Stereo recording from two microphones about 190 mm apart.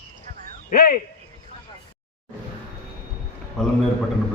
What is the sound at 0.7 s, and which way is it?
Speech, 50° left (ahead or behind).